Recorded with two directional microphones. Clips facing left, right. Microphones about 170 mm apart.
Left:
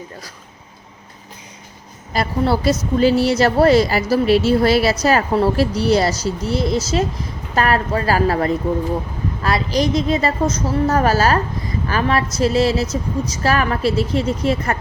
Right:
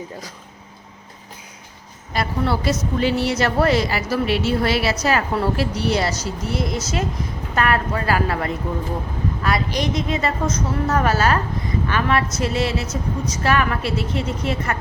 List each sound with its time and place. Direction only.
2.1 s a woman's voice: 35° left (ahead or behind)